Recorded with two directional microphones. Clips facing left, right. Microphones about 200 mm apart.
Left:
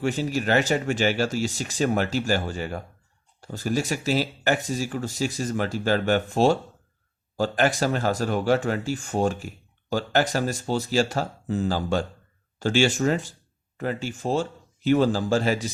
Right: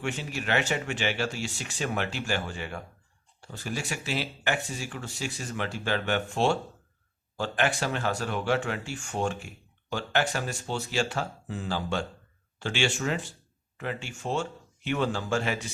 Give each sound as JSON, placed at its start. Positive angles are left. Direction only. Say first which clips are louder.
{"t": 0.0, "sound": "speech", "louder": "left 8 dB", "side_deg": 40}